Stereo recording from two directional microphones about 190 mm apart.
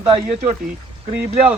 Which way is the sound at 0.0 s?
30° right (ahead or behind).